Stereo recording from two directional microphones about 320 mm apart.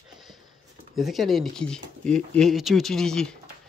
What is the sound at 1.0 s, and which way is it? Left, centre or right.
Speech, centre.